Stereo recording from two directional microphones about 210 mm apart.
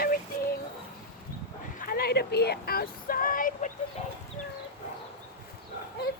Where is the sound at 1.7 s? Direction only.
45° left (ahead or behind).